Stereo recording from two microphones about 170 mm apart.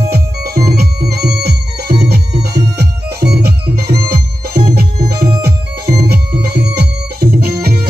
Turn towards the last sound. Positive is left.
turn(degrees=-65)  # may be behind; listen again after turning